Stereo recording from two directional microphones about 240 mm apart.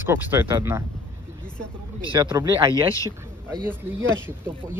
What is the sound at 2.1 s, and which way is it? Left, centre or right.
Speech, centre.